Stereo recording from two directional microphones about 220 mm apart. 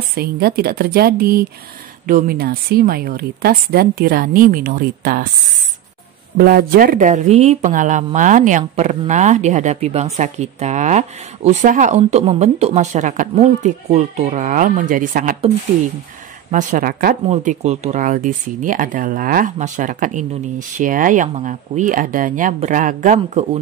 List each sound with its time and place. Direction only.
0.1 s speech: 45° right (ahead or behind)
6.3 s speech: 40° right (ahead or behind)
16.4 s speech: 35° right (ahead or behind)